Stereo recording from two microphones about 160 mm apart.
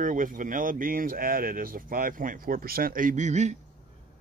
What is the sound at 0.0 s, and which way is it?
Speech, 55° right (ahead or behind).